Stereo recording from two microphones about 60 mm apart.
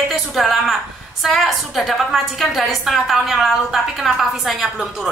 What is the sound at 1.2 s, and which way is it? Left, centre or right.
A woman's voice, centre.